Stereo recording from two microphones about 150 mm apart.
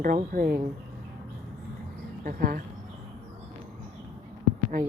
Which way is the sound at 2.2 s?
65° right (ahead or behind).